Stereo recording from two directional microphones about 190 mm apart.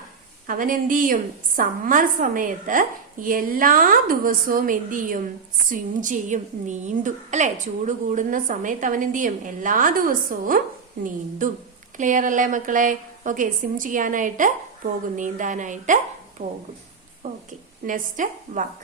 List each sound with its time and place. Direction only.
0.4 s a woman's voice: 45° right (ahead or behind)